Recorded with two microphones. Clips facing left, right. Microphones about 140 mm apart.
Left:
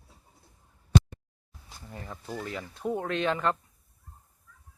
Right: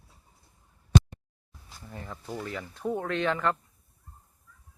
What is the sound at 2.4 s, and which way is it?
A man's voice, 20° left (ahead or behind).